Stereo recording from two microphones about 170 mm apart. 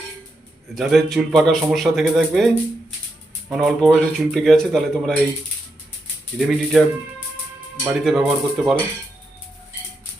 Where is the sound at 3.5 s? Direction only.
Centre (ahead or behind).